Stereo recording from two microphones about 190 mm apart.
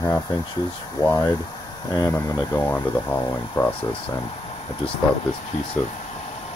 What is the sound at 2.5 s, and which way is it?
Speech, 10° left (ahead or behind).